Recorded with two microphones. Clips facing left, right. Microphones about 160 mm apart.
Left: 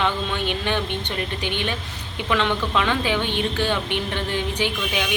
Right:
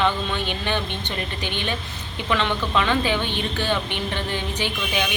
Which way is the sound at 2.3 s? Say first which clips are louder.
Left 1 dB; centre (ahead or behind).